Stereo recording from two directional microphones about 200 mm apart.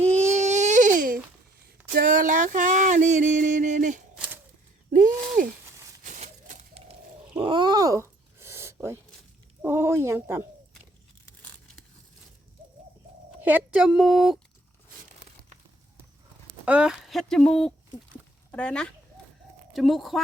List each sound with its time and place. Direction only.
0.1 s baby cry: 35° right (ahead or behind)
2.0 s a sound: 40° right (ahead or behind); by 10.4 s 10° right (ahead or behind)
13.4 s speech: 5° right (ahead or behind)
16.6 s speech: 5° right (ahead or behind)